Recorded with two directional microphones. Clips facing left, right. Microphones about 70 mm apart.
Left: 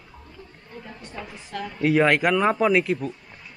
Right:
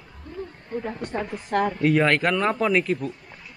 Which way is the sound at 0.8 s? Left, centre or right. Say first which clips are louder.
Right 9 dB; right.